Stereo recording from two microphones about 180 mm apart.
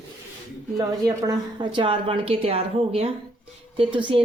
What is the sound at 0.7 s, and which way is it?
A woman's voice, 20° right (ahead or behind).